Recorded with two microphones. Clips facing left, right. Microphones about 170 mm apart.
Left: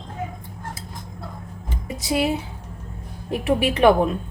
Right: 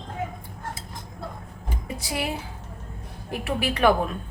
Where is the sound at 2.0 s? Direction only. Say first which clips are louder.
Left 8 dB; 25° left (ahead or behind).